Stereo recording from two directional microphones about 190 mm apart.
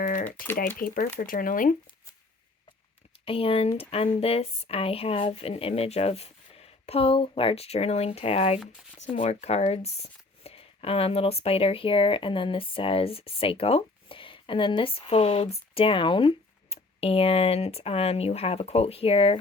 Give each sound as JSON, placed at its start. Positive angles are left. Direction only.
{"t": 0.0, "sound": "speech", "side_deg": 45}
{"t": 3.2, "sound": "speech", "side_deg": 30}